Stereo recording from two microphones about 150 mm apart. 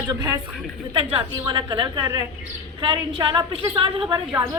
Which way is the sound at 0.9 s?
40° right (ahead or behind).